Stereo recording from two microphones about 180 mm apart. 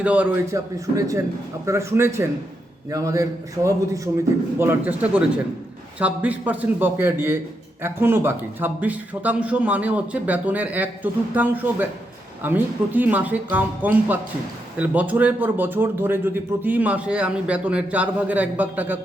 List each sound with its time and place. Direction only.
0.0 s a man's voice: 10° right (ahead or behind)